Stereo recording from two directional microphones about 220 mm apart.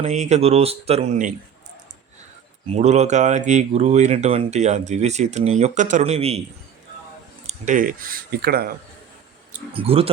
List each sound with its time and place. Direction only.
0.0 s speech: 30° right (ahead or behind)
2.6 s speech: 30° right (ahead or behind)
7.4 s speech: 35° right (ahead or behind)
9.5 s speech: 25° right (ahead or behind)